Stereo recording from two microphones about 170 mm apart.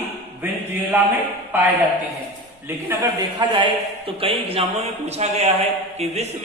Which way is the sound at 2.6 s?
15° right (ahead or behind).